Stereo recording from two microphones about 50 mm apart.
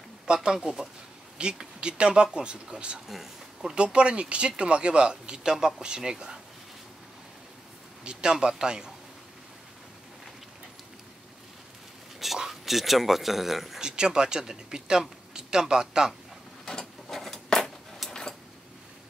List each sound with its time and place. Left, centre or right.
0.3 s speech: centre
8.0 s speech: centre
12.4 s speech: centre
13.7 s speech: centre
16.6 s a sound: centre